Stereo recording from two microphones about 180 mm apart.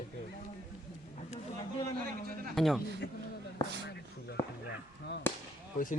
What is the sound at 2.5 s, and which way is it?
Speech, centre (ahead or behind).